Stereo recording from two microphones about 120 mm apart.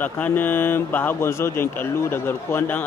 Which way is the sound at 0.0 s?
15° left (ahead or behind).